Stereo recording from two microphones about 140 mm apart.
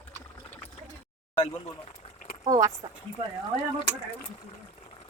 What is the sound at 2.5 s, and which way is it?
Speech, 25° right (ahead or behind).